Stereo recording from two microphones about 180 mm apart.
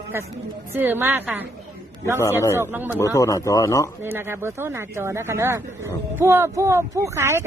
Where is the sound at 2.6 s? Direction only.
10° right (ahead or behind).